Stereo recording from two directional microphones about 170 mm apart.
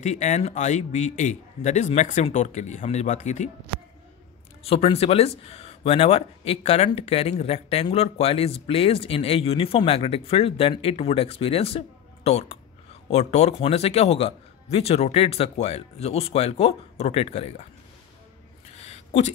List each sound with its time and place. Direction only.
0.0 s a man's voice: 40° left (ahead or behind)
4.6 s speech: 35° left (ahead or behind)